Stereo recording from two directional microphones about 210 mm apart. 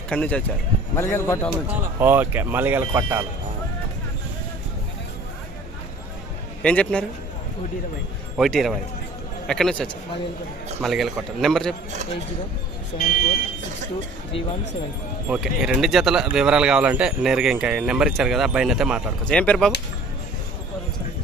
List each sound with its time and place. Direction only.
0.1 s speech: 5° left (ahead or behind)
1.5 s speech: 10° right (ahead or behind)
6.6 s speech: 5° left (ahead or behind)
8.4 s speech: centre (ahead or behind)
13.0 s speech: 45° left (ahead or behind)
15.3 s speech: centre (ahead or behind)